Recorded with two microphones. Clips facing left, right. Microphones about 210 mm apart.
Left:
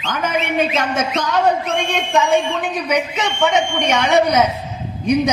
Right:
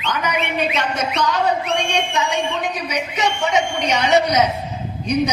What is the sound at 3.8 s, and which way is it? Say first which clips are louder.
Speech: left 2 dB; 50° left (ahead or behind).